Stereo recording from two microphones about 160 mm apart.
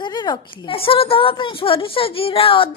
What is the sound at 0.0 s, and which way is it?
A woman's voice, 25° left (ahead or behind).